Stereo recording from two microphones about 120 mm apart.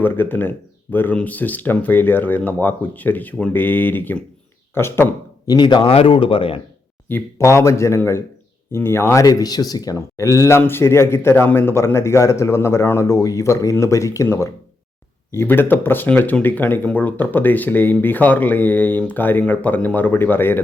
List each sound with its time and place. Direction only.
0.0 s speech: 15° left (ahead or behind)
5.5 s speech: 40° left (ahead or behind)
7.1 s speech: 25° left (ahead or behind)